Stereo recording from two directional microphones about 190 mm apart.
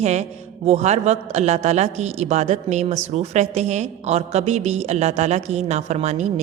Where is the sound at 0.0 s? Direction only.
35° right (ahead or behind).